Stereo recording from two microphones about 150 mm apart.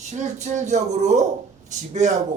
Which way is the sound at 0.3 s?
50° right (ahead or behind).